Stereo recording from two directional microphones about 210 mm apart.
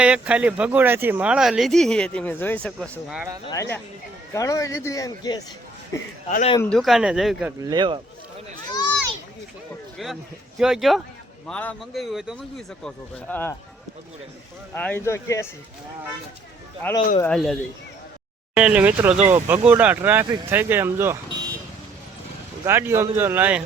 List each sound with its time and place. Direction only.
0.0 s speech: 5° right (ahead or behind)
3.4 s speech: 15° left (ahead or behind)
6.2 s speech: 30° left (ahead or behind)
6.6 s speech: 5° left (ahead or behind)
7.6 s speech: 20° right (ahead or behind)
10.6 s speech: centre (ahead or behind)
14.8 s speech: 10° left (ahead or behind)
17.2 s speech: 5° left (ahead or behind); by 21.2 s 10° right (ahead or behind)
22.6 s speech: 10° right (ahead or behind)